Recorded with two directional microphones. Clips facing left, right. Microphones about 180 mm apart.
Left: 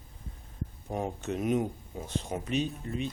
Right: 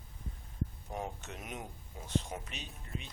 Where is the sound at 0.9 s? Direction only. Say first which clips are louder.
Left 8 dB; 35° left (ahead or behind).